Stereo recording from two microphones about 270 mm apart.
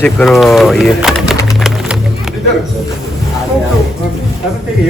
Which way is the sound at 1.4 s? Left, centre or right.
Centre.